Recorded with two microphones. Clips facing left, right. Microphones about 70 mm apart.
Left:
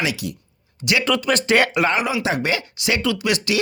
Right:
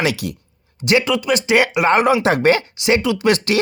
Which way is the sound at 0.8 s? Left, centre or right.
Right.